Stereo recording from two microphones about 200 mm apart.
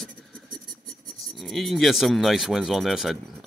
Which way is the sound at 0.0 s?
5° left (ahead or behind).